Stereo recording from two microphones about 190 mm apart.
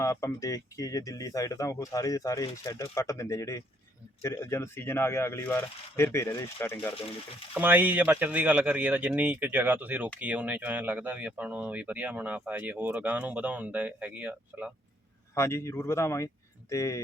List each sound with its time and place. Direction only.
0.0 s speech: 15° left (ahead or behind)
7.5 s speech: 10° right (ahead or behind)
15.4 s speech: 15° left (ahead or behind)